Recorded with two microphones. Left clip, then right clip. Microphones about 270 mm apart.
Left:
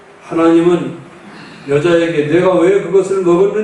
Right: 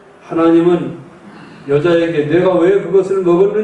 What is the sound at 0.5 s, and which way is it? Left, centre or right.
A man's voice, centre.